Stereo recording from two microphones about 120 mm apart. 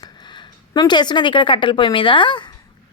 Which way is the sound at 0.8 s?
40° left (ahead or behind).